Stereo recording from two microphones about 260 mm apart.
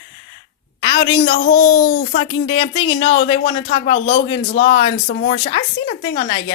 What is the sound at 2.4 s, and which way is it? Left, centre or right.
Speech, centre.